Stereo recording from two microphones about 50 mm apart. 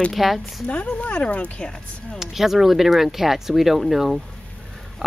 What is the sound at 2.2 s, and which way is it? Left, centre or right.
Speech, centre.